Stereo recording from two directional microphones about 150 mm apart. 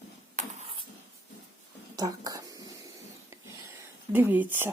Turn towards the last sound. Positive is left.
turn(degrees=-15)  # may be behind; listen again after turning